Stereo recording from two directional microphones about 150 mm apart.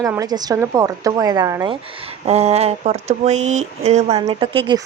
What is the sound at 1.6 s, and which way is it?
Speech, 35° right (ahead or behind).